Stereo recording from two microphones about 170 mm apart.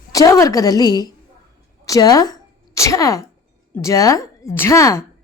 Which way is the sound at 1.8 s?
20° left (ahead or behind).